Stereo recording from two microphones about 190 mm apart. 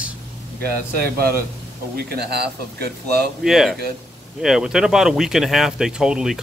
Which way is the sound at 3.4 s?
Centre (ahead or behind).